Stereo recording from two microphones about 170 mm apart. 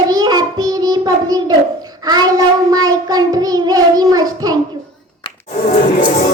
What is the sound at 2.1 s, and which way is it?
Child singing, 20° right (ahead or behind).